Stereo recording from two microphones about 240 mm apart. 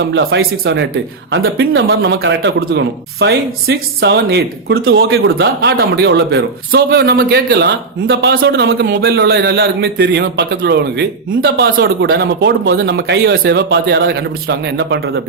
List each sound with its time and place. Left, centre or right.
0.1 s a man's voice: right
5.0 s a man's voice: right